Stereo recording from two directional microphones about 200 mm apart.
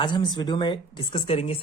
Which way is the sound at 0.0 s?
25° left (ahead or behind).